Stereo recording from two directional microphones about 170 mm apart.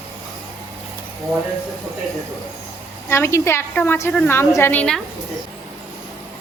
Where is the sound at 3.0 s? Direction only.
15° left (ahead or behind).